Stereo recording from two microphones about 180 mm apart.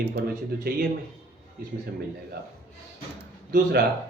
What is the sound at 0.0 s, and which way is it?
A man's voice, 65° right (ahead or behind).